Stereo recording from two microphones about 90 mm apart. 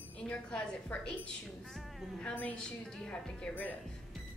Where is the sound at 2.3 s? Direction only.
15° left (ahead or behind).